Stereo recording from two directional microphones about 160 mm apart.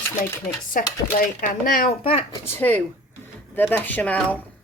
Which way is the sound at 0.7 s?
60° left (ahead or behind).